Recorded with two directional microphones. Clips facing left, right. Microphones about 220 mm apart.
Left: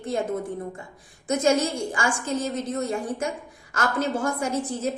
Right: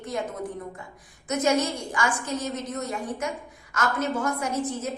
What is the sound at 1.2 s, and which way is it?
A woman's voice, 30° left (ahead or behind).